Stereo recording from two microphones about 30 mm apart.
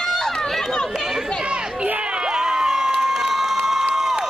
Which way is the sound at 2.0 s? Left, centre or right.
Right.